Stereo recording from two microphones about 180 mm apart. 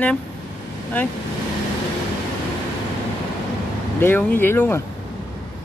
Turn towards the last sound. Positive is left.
turn(degrees=10)  # may be behind; listen again after turning